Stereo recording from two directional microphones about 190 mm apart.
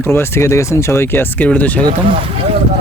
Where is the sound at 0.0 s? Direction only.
10° left (ahead or behind).